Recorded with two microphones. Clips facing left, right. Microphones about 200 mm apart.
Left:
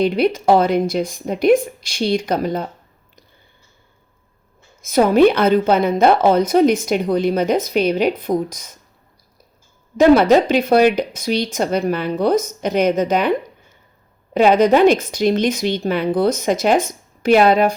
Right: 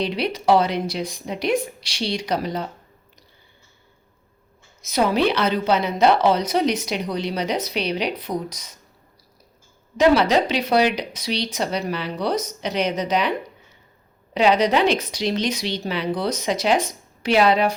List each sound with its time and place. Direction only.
0.0 s a woman's voice: 50° left (ahead or behind)
4.8 s a woman's voice: 50° left (ahead or behind)
10.0 s a woman's voice: 50° left (ahead or behind)
14.3 s a woman's voice: 50° left (ahead or behind)